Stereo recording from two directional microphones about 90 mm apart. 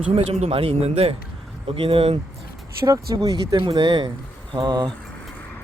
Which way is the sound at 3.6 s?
65° right (ahead or behind).